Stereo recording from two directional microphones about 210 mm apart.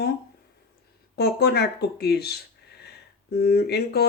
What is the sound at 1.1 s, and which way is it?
Speech, 50° left (ahead or behind).